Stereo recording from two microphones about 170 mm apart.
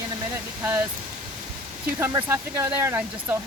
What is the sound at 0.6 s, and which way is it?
Speech, 10° right (ahead or behind).